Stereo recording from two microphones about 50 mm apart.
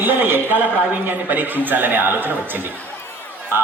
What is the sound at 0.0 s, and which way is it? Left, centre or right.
A man's voice, right.